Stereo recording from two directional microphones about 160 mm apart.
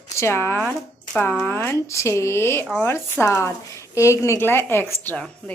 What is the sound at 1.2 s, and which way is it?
A woman's voice, 15° left (ahead or behind).